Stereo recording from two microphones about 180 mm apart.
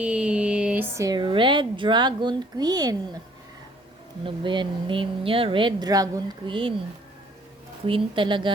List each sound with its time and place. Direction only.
0.0 s speech: 5° right (ahead or behind); by 2.9 s 20° right (ahead or behind)
4.3 s speech: 25° right (ahead or behind)
7.9 s speech: 30° right (ahead or behind)